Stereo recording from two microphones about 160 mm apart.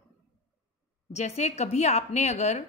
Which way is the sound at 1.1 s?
45° left (ahead or behind).